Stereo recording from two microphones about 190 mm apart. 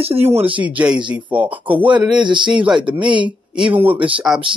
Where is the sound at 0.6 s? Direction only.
5° right (ahead or behind).